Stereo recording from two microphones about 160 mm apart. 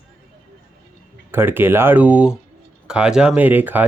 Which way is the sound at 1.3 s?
15° right (ahead or behind).